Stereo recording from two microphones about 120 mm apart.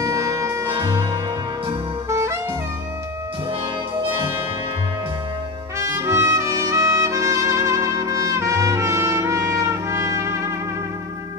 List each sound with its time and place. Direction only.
0.0 s music: 30° right (ahead or behind)
0.7 s music: 40° right (ahead or behind)
2.0 s saxophone: 25° right (ahead or behind)
5.8 s music: 25° right (ahead or behind)